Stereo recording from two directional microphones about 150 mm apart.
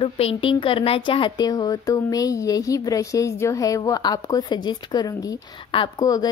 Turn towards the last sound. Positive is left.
turn(degrees=25)  # may be behind; listen again after turning